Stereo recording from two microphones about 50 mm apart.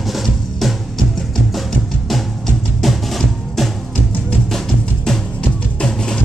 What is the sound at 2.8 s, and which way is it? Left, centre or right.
Music, centre.